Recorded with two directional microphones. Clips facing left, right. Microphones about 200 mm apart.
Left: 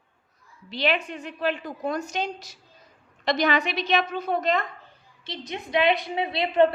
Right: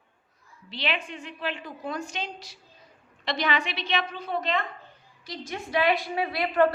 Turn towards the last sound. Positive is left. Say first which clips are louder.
# left 2 dB
turn(degrees=25)  # may be behind; listen again after turning